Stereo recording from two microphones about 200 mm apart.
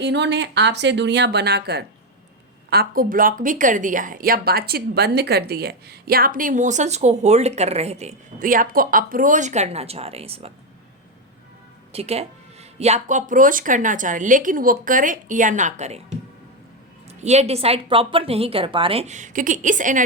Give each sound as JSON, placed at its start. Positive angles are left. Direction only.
{"t": 0.0, "sound": "a woman's voice", "side_deg": -60}
{"t": 11.9, "sound": "a woman's voice", "side_deg": -30}